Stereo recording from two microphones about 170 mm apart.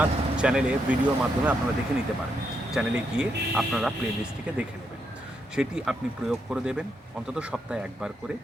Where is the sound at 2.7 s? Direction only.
5° right (ahead or behind).